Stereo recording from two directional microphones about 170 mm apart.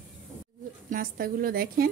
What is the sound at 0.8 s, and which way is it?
Speech, 55° right (ahead or behind).